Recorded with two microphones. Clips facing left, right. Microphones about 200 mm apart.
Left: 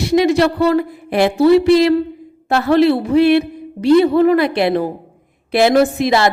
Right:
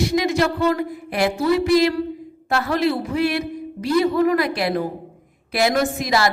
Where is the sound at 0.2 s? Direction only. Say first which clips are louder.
Left 10 dB; 30° left (ahead or behind).